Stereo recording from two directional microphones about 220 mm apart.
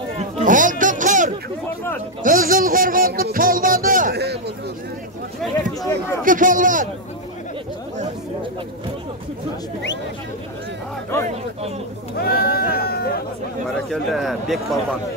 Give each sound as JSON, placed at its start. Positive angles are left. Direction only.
{"t": 0.2, "sound": "a sound", "side_deg": -35}
{"t": 2.2, "sound": "music", "side_deg": -40}
{"t": 5.8, "sound": "speech", "side_deg": 10}
{"t": 6.2, "sound": "speech", "side_deg": -35}
{"t": 12.2, "sound": "sheep", "side_deg": 45}
{"t": 13.8, "sound": "a man's voice", "side_deg": 0}